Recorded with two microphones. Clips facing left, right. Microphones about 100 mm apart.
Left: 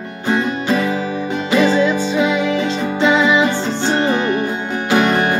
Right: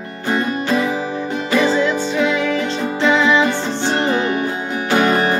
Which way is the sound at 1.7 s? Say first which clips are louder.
Left 2 dB; 15° left (ahead or behind).